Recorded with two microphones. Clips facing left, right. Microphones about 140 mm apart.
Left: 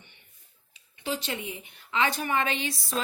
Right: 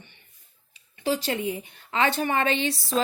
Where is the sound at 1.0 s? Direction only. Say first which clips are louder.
Right 7 dB; 35° right (ahead or behind).